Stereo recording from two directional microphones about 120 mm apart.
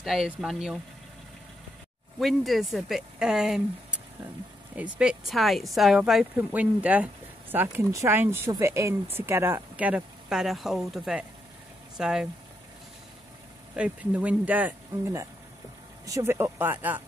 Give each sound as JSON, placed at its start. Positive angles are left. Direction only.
{"t": 0.0, "sound": "speech", "side_deg": -5}
{"t": 2.1, "sound": "speech", "side_deg": 0}
{"t": 7.6, "sound": "speech", "side_deg": -25}
{"t": 13.7, "sound": "speech", "side_deg": -10}